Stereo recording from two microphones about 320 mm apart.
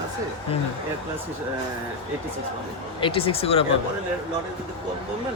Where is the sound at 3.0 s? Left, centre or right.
Centre.